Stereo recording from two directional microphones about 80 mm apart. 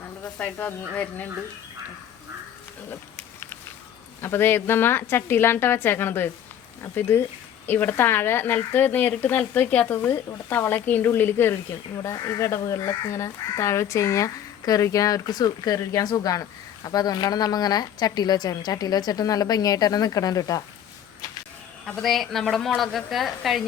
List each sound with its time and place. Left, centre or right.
0.3 s speech: centre
3.2 s a sound: left
4.2 s speech: left
12.4 s speech: left
21.8 s a woman's voice: centre